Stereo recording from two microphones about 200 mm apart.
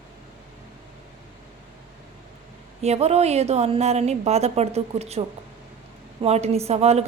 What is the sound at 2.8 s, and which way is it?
A woman's voice, 30° right (ahead or behind).